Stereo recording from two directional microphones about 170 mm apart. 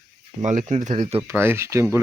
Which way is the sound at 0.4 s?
45° right (ahead or behind).